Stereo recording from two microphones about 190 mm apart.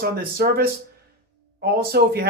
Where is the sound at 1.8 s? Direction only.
55° right (ahead or behind).